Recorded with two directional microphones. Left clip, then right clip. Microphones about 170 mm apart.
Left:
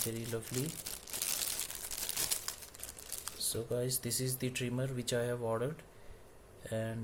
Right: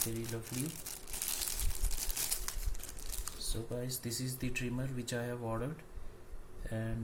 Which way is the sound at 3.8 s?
40° left (ahead or behind).